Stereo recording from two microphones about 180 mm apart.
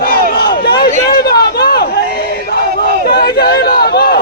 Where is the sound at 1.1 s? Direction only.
60° left (ahead or behind).